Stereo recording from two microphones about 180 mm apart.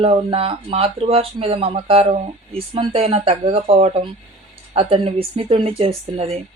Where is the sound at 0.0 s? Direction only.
30° right (ahead or behind).